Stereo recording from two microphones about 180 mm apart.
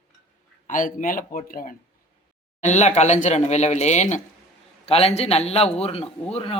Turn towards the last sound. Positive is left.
turn(degrees=35)  # may be behind; listen again after turning